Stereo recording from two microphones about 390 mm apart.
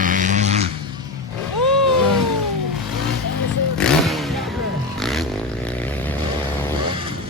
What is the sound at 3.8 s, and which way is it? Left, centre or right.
Vehicle, centre.